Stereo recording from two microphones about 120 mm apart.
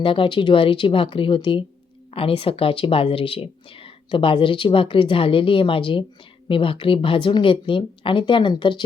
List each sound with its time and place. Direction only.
0.0 s speech: 45° left (ahead or behind)